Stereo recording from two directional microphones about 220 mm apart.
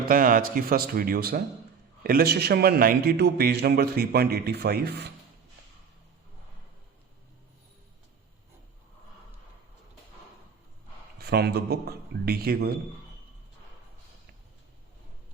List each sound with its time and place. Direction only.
0.0 s a man's voice: 40° right (ahead or behind)
11.2 s a man's voice: 45° right (ahead or behind)